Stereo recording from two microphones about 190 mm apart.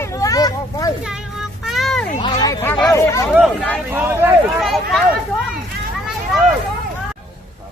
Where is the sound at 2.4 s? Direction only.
15° left (ahead or behind).